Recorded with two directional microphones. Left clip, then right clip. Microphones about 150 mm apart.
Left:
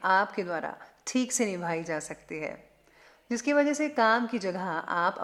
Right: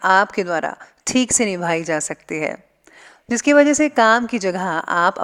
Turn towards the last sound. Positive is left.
turn(degrees=-45)  # may be behind; listen again after turning